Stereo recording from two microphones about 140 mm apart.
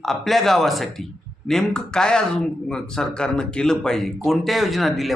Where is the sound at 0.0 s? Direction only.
Centre (ahead or behind).